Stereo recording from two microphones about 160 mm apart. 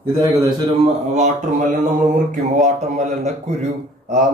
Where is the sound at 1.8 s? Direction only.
55° right (ahead or behind).